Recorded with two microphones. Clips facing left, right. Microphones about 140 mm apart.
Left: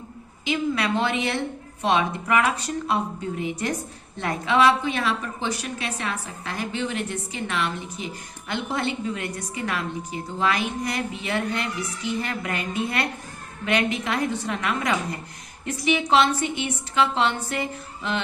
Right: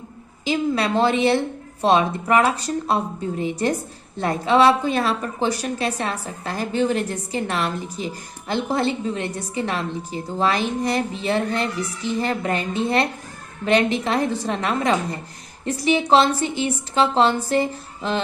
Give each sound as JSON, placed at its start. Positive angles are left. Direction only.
{"t": 0.4, "sound": "a woman's voice", "side_deg": -35}